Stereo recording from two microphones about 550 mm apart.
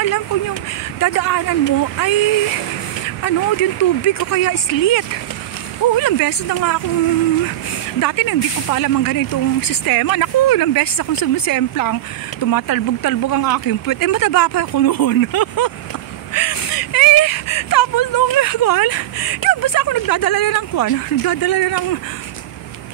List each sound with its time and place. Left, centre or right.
0.9 s speech: left
8.0 s speech: left